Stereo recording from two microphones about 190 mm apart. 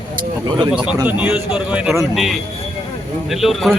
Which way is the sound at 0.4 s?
25° right (ahead or behind).